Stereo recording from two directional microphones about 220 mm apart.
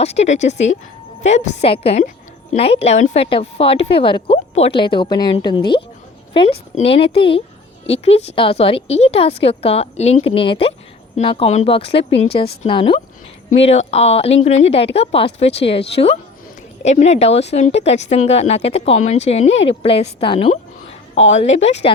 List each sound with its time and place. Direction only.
0.0 s a woman's voice: 30° left (ahead or behind)